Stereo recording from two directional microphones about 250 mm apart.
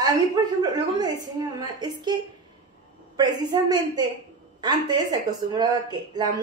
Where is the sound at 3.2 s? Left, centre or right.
Centre.